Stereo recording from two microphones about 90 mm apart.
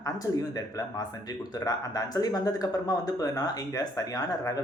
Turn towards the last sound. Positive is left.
turn(degrees=40)  # may be behind; listen again after turning